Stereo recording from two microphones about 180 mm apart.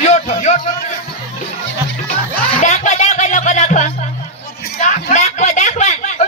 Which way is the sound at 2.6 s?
40° left (ahead or behind).